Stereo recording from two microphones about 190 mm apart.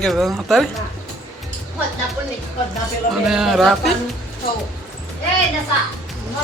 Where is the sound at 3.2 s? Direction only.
Centre (ahead or behind).